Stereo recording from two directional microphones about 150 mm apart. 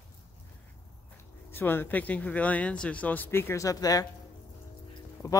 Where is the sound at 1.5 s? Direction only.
15° left (ahead or behind).